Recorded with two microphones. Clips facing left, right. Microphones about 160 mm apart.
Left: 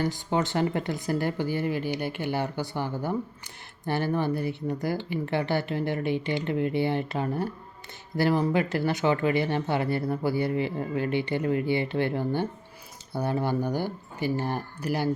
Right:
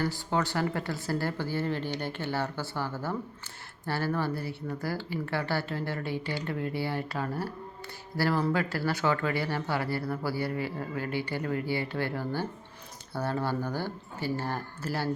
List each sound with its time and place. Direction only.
0.0 s speech: 20° left (ahead or behind)